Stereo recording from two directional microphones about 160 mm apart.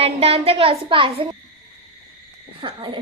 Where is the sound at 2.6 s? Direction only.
30° right (ahead or behind).